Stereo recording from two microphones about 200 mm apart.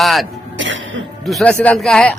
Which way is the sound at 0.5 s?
65° right (ahead or behind).